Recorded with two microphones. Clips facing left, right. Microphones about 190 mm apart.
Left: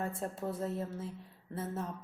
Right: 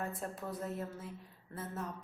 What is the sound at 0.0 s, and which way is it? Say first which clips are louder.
Speech: left 4 dB; 30° left (ahead or behind).